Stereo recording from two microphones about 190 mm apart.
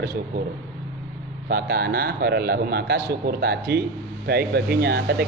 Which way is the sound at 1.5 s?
55° right (ahead or behind).